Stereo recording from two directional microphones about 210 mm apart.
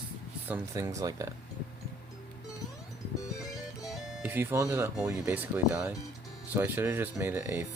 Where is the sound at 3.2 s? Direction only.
15° left (ahead or behind).